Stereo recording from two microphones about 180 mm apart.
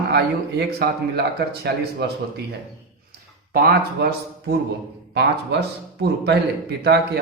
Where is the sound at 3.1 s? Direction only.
55° right (ahead or behind).